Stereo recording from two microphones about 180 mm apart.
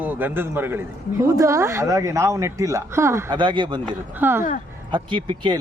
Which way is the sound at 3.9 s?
10° right (ahead or behind).